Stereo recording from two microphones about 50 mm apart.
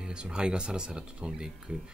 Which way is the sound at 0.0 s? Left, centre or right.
Centre.